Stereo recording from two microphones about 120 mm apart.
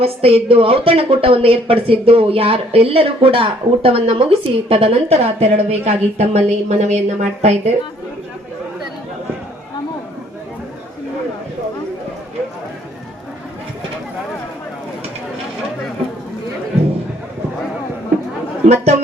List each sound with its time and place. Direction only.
0.0 s speech: 55° right (ahead or behind); by 7.5 s 70° right (ahead or behind)
18.6 s speech: 65° right (ahead or behind)